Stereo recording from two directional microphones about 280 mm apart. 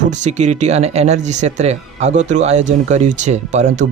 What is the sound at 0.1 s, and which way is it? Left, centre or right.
Speech, right.